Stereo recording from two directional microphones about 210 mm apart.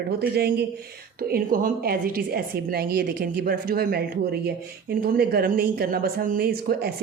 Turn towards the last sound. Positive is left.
turn(degrees=-45)  # may be behind; listen again after turning